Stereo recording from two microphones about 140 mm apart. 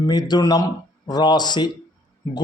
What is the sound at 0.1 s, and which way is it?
Speech, 30° left (ahead or behind).